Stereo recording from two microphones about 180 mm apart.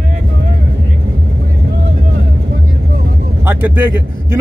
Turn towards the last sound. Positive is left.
turn(degrees=-10)  # may be behind; listen again after turning